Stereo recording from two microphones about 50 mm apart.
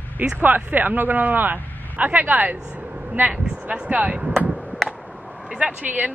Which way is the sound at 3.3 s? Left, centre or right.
Centre.